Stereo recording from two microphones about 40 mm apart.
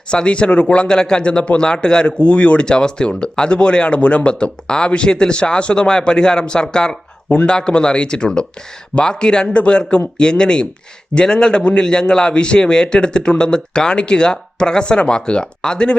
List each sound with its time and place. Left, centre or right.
0.1 s a man's voice: left